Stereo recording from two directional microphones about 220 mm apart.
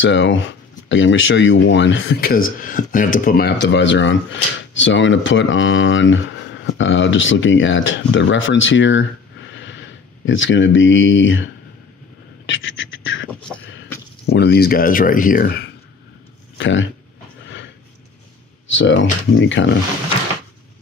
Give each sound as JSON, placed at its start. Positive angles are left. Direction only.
{"t": 0.0, "sound": "speech", "side_deg": 55}
{"t": 9.5, "sound": "a sound", "side_deg": 55}
{"t": 12.4, "sound": "beatboxing", "side_deg": 60}
{"t": 14.2, "sound": "speech", "side_deg": 50}
{"t": 16.5, "sound": "speech", "side_deg": 55}
{"t": 18.8, "sound": "speech", "side_deg": 55}